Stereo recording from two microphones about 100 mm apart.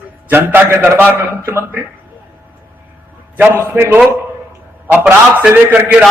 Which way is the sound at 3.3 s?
20° right (ahead or behind).